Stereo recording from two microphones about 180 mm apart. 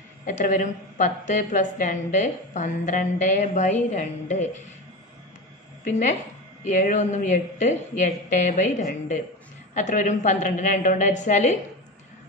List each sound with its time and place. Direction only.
0.3 s a woman's voice: 45° left (ahead or behind)
5.9 s a woman's voice: 45° left (ahead or behind)